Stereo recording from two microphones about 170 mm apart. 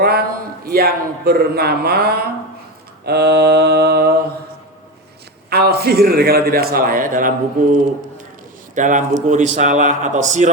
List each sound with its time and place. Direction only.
0.0 s a man's voice: 65° right (ahead or behind)
3.0 s mantra: 70° right (ahead or behind)
5.5 s a man's voice: 70° right (ahead or behind); by 10.5 s 45° right (ahead or behind)